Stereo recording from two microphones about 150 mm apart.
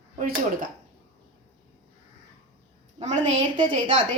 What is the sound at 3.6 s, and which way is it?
Speech, 35° right (ahead or behind).